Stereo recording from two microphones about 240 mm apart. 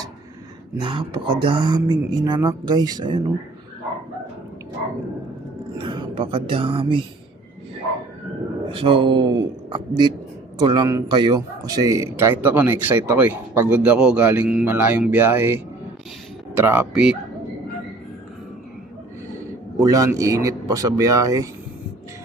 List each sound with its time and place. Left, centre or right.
0.8 s speech: centre
5.7 s speech: right
8.7 s a man's voice: right; by 17.2 s centre
19.8 s a man's voice: centre